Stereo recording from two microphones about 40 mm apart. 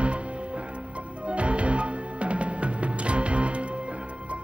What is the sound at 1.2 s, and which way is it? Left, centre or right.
Music, right.